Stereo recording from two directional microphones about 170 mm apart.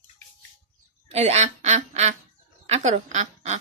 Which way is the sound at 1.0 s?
40° right (ahead or behind).